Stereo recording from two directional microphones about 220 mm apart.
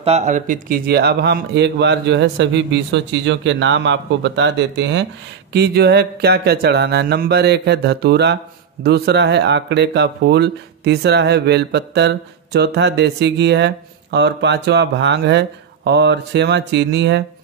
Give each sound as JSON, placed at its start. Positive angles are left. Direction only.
{"t": 0.0, "sound": "speech", "side_deg": -30}